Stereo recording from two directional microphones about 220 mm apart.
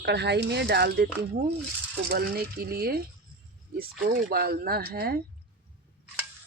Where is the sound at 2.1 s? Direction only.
45° right (ahead or behind).